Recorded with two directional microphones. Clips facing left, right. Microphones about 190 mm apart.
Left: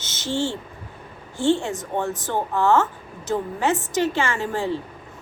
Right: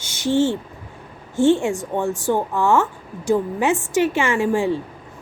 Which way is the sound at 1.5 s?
15° right (ahead or behind).